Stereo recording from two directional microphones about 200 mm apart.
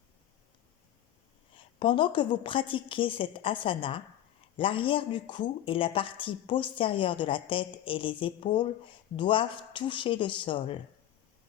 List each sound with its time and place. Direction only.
1.5 s speech: 25° left (ahead or behind)